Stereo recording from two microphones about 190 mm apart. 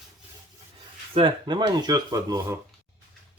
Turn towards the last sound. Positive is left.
turn(degrees=-20)  # may be behind; listen again after turning